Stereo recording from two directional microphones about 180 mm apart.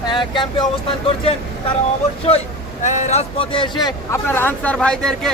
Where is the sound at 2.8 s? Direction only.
40° left (ahead or behind).